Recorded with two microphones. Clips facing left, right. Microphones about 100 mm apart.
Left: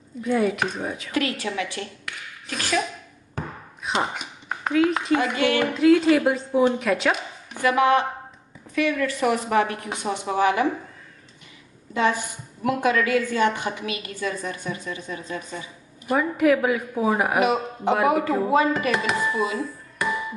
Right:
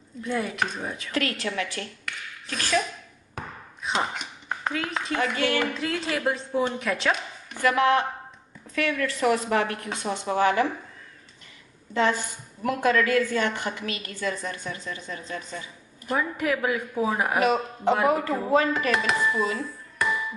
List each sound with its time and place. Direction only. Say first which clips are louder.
0.2 s a woman's voice: left 5 dB; 5° left (ahead or behind)
1.1 s a woman's voice: left 2 dB; 15° left (ahead or behind)
3.8 s speech: left 2 dB; 5° left (ahead or behind)
5.2 s a woman's voice: left 3 dB; 15° left (ahead or behind)
5.7 s a woman's voice: left 12 dB; 5° left (ahead or behind)
7.5 s a woman's voice: left 2 dB; 15° left (ahead or behind)
11.9 s a woman's voice: left 1 dB; 15° left (ahead or behind)